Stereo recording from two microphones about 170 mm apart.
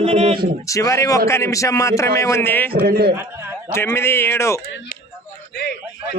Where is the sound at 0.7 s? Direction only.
20° left (ahead or behind).